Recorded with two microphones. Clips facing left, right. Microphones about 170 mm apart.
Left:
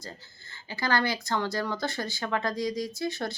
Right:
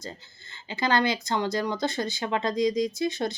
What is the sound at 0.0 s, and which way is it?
Speech, 20° right (ahead or behind).